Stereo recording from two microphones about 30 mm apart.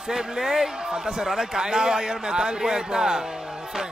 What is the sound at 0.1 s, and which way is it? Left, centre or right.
A man's voice, centre.